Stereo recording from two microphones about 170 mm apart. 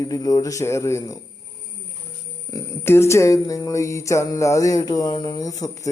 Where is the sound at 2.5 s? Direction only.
15° left (ahead or behind).